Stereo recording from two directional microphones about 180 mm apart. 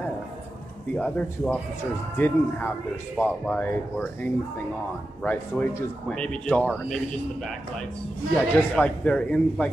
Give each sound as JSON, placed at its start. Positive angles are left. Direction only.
{"t": 0.9, "sound": "a man's voice", "side_deg": 5}
{"t": 8.4, "sound": "a man's voice", "side_deg": 10}